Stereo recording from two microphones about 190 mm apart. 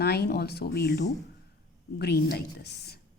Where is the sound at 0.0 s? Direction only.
55° left (ahead or behind).